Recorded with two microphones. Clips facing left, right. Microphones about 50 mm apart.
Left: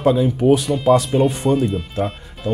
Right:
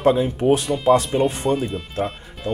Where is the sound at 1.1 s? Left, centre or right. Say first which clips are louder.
Left 3 dB; centre.